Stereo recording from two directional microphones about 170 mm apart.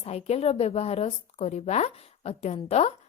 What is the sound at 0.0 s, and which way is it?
A woman's voice, 40° left (ahead or behind).